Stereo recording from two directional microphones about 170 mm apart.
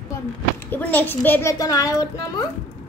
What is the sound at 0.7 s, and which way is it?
A child's voice, 10° left (ahead or behind).